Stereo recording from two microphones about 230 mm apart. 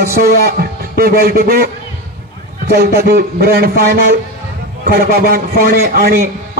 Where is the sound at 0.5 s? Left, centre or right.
Right.